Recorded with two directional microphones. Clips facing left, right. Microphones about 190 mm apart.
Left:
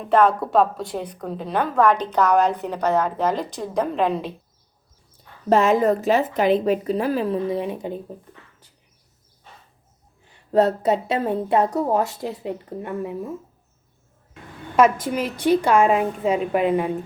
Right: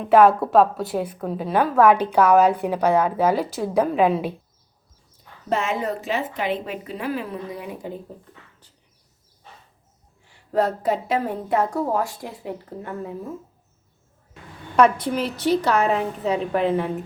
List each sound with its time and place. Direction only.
0.0 s a woman's voice: 5° right (ahead or behind)
5.5 s speech: 40° left (ahead or behind); by 8.0 s 20° left (ahead or behind)
10.2 s a woman's voice: 25° left (ahead or behind)
15.4 s a woman's voice: 10° left (ahead or behind)